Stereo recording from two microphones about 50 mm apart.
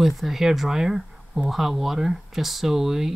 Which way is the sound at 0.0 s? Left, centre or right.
Centre.